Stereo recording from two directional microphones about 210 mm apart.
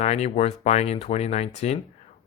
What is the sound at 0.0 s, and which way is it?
Speech, 30° left (ahead or behind).